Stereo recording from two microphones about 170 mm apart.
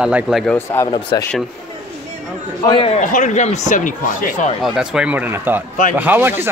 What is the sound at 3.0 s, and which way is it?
Speech, 45° left (ahead or behind).